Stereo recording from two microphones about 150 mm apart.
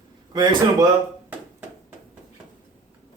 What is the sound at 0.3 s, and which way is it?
Speech, 30° right (ahead or behind).